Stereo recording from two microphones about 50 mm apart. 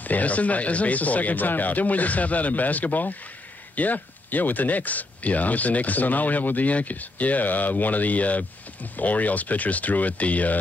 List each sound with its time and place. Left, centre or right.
0.0 s speech: left